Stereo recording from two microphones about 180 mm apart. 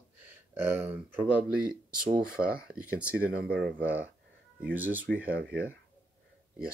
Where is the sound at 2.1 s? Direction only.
55° right (ahead or behind).